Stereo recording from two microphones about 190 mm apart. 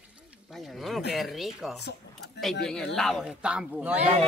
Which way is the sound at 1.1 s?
Centre (ahead or behind).